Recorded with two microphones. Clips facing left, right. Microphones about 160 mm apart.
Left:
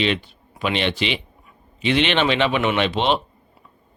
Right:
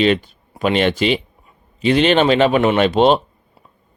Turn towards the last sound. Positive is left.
turn(degrees=-45)  # may be behind; listen again after turning